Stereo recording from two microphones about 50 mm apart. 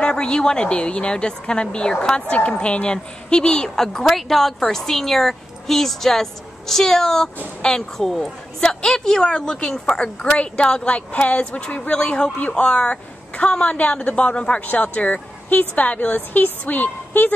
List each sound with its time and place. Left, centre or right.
0.0 s a woman's voice: centre; by 17.3 s left